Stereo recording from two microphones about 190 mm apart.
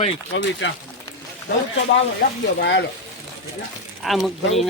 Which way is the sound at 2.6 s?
65° left (ahead or behind).